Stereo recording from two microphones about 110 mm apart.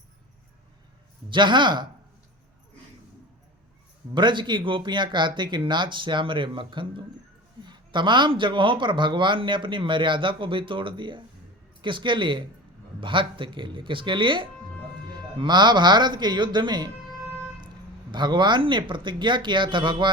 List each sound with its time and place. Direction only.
1.3 s speech: 45° right (ahead or behind)
4.1 s speech: 45° right (ahead or behind)
18.1 s speech: 45° right (ahead or behind)